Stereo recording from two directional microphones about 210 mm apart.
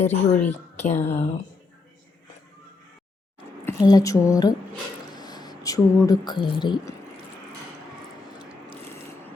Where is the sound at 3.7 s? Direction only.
15° left (ahead or behind).